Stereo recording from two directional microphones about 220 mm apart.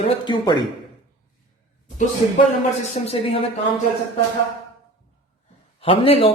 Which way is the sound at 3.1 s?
25° left (ahead or behind).